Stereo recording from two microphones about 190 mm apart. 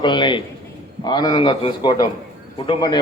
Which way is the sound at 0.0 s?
25° left (ahead or behind).